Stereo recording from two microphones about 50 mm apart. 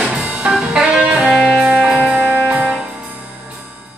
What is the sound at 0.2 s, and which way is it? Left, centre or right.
Music, right.